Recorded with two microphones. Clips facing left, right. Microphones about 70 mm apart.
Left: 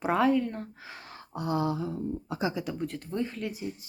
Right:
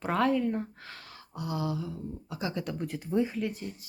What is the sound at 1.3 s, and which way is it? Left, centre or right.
Speech, left.